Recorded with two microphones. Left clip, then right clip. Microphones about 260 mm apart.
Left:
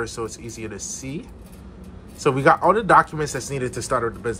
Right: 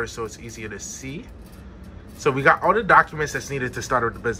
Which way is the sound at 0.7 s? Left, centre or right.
Centre.